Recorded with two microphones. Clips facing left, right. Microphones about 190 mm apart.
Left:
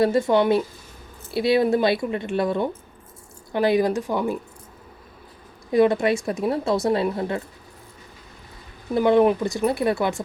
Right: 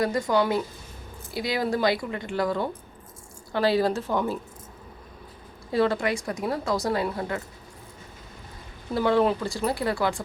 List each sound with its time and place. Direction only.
0.0 s speech: 25° left (ahead or behind)
5.7 s speech: 20° left (ahead or behind)
9.0 s speech: 20° left (ahead or behind)